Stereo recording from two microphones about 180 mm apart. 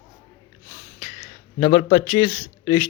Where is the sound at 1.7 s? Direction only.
25° left (ahead or behind).